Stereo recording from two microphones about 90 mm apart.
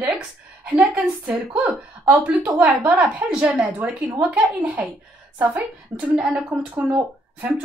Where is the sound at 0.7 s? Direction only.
15° right (ahead or behind).